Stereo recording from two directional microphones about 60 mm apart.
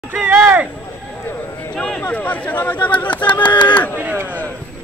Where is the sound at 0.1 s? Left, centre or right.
Right.